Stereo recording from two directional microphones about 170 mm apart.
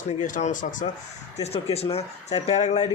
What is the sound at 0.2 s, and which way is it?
Speech, 50° left (ahead or behind).